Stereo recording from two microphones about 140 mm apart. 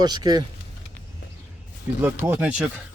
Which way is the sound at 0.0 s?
30° right (ahead or behind).